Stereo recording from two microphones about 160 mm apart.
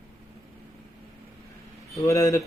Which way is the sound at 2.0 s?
20° left (ahead or behind).